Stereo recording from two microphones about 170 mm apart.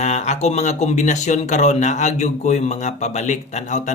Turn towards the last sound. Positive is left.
turn(degrees=45)  # may be behind; listen again after turning